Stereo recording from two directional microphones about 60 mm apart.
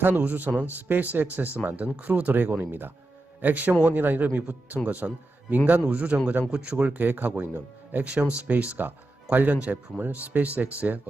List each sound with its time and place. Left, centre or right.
0.0 s speech: right